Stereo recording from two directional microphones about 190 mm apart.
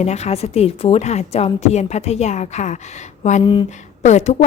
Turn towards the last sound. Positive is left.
turn(degrees=35)  # may be behind; listen again after turning